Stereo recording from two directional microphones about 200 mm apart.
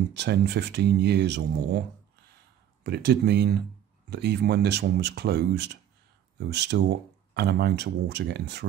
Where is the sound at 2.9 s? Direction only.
55° right (ahead or behind).